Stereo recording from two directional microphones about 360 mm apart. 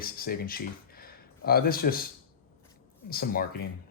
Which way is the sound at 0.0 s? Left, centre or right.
Left.